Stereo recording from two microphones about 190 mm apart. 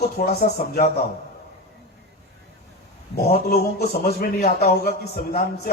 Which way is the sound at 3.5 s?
55° left (ahead or behind).